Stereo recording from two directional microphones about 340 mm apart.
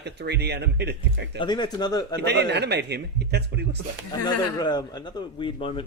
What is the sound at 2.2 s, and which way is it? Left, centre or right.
Speech, right.